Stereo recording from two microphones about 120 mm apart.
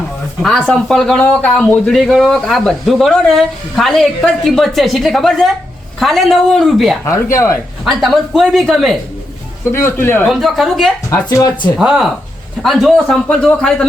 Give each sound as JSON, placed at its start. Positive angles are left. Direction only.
{"t": 0.4, "sound": "a man's voice", "side_deg": 5}
{"t": 7.0, "sound": "speech", "side_deg": 25}
{"t": 7.9, "sound": "a man's voice", "side_deg": 0}
{"t": 9.7, "sound": "speech", "side_deg": 20}
{"t": 10.2, "sound": "a man's voice", "side_deg": 0}
{"t": 11.3, "sound": "speech", "side_deg": 30}
{"t": 11.8, "sound": "a man's voice", "side_deg": -5}